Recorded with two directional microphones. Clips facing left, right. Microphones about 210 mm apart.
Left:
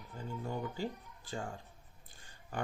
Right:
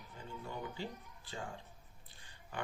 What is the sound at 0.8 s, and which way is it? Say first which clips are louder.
Speech: left 5 dB; 45° left (ahead or behind).